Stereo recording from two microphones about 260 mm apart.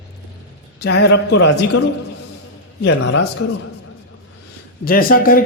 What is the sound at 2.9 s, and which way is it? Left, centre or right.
Speech, left.